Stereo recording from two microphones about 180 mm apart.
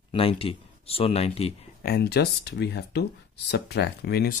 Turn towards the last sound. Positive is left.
turn(degrees=65)  # may be behind; listen again after turning